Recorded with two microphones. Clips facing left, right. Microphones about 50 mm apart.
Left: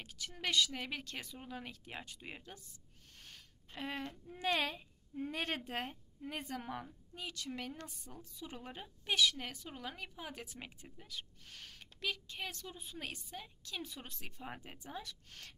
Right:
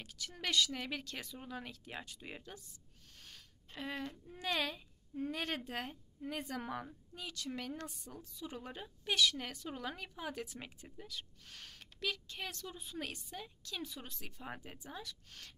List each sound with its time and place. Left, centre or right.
0.0 s a woman's voice: left
3.7 s a woman's voice: left
8.5 s speech: centre
10.3 s a woman's voice: left
13.8 s a woman's voice: left